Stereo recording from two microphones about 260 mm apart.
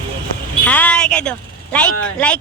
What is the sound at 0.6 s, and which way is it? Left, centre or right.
Speech, centre.